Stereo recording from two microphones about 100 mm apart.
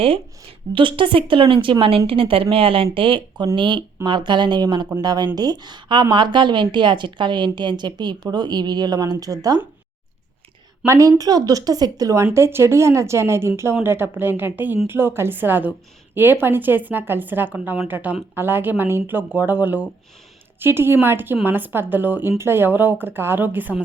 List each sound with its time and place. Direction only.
0.7 s speech: 60° right (ahead or behind); by 9.6 s 40° right (ahead or behind)
10.8 s a woman's voice: 30° right (ahead or behind)